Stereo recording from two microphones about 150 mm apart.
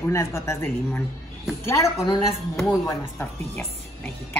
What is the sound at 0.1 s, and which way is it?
A woman's voice, 20° left (ahead or behind).